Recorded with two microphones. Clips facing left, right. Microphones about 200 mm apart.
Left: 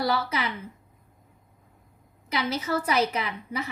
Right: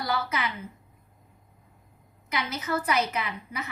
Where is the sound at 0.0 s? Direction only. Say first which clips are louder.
Left 3 dB; 30° left (ahead or behind).